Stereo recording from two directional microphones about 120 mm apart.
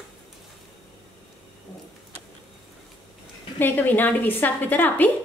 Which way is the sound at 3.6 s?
15° left (ahead or behind).